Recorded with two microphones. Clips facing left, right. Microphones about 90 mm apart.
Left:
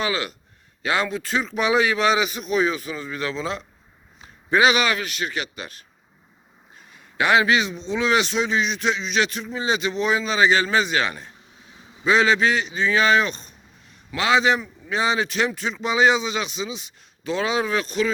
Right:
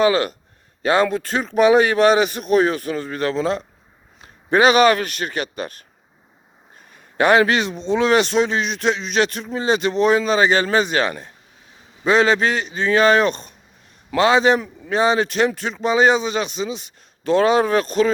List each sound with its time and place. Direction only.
0.0 s a man's voice: 45° right (ahead or behind)
14.2 s a man's voice: 40° right (ahead or behind)